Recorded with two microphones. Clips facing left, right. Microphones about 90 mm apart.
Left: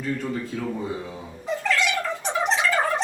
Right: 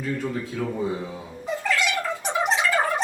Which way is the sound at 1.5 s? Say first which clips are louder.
Left 1 dB; 10° right (ahead or behind).